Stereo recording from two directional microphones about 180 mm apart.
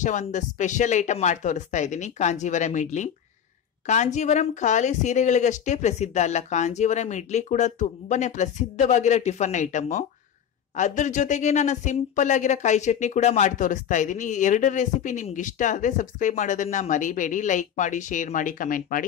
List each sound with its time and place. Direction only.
0.0 s speech: 40° left (ahead or behind)